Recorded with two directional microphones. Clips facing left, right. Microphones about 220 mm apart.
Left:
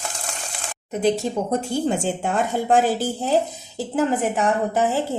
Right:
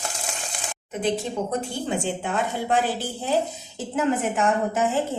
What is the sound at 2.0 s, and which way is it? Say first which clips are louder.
Speech: left 3 dB; 45° left (ahead or behind).